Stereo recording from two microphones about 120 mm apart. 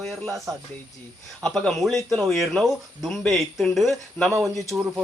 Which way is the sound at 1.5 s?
5° left (ahead or behind).